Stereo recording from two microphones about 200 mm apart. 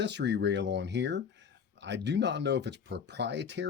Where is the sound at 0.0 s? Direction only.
60° right (ahead or behind).